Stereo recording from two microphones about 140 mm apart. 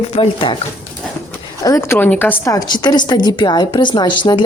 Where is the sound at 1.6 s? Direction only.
20° left (ahead or behind).